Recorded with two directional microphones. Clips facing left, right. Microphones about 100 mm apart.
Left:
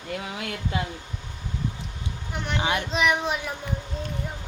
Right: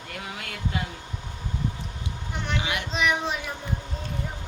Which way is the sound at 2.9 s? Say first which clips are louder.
Even; centre (ahead or behind).